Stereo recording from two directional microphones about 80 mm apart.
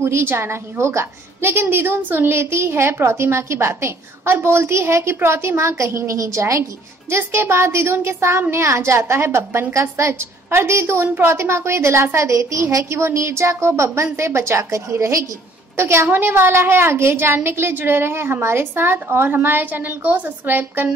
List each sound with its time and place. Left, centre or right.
0.0 s a woman's voice: right